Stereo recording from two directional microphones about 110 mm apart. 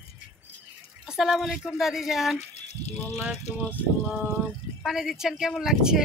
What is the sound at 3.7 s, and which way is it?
Speech, 15° right (ahead or behind).